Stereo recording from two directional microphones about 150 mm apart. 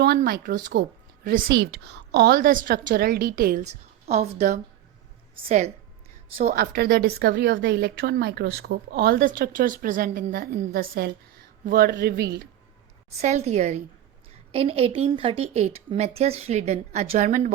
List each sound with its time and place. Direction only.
0.0 s a woman's voice: 90° right
3.6 s a woman's voice: 50° right (ahead or behind)
6.5 s a woman's voice: 75° right (ahead or behind)
10.3 s a woman's voice: 80° right
13.2 s a woman's voice: 50° right (ahead or behind)